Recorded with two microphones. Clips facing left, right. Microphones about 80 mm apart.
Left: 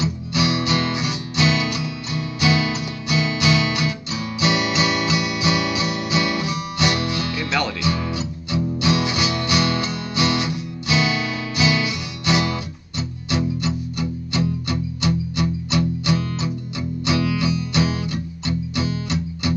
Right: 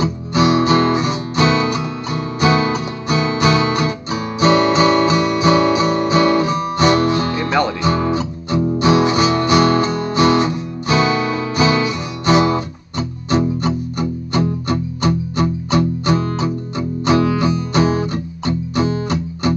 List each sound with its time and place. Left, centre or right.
0.0 s guitar: right
7.8 s music: right